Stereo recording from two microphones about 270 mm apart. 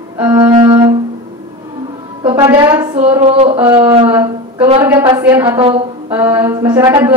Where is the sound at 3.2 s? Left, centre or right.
Right.